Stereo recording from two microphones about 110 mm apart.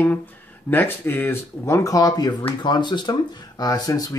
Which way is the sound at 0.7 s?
20° left (ahead or behind).